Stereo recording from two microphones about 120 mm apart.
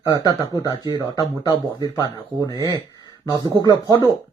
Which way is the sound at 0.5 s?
30° left (ahead or behind).